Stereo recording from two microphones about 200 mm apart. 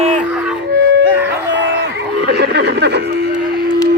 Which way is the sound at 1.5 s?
60° right (ahead or behind).